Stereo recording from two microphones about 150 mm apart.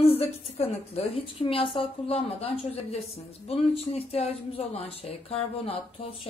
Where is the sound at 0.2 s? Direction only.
40° left (ahead or behind).